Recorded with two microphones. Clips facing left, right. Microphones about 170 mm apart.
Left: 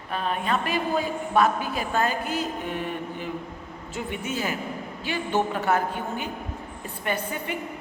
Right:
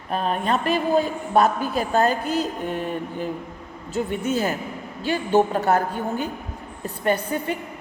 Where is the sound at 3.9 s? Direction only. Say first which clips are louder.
Right 7 dB; 40° right (ahead or behind).